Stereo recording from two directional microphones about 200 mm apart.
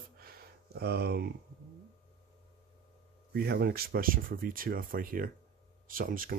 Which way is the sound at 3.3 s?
50° right (ahead or behind).